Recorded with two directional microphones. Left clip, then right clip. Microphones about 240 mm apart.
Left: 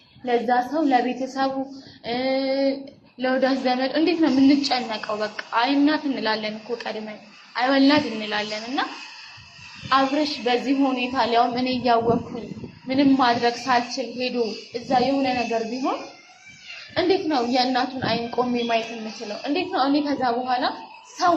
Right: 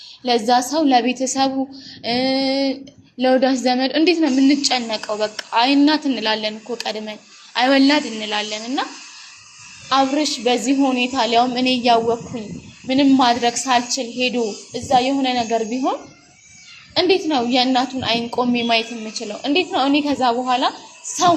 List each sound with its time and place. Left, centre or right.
0.3 s a woman's voice: right
6.1 s a woman's voice: right
7.9 s a woman's voice: right
9.9 s a woman's voice: right